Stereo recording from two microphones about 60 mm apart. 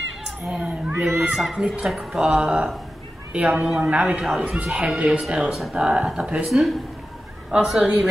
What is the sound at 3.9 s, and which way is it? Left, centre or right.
Speech, right.